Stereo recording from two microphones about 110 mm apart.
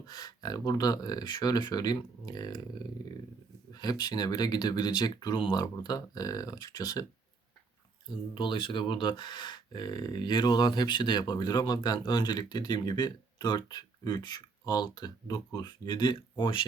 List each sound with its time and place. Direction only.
0.1 s speech: 35° left (ahead or behind)
8.4 s speech: 50° left (ahead or behind)
16.4 s speech: 50° left (ahead or behind)